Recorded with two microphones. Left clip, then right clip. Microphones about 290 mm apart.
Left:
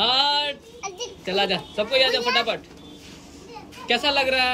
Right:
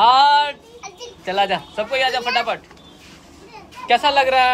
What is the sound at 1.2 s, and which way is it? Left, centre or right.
Speech, centre.